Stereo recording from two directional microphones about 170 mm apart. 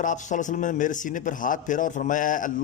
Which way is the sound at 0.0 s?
45° left (ahead or behind).